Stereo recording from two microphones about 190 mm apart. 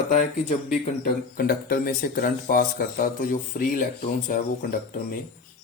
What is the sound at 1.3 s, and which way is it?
Speech, 50° left (ahead or behind).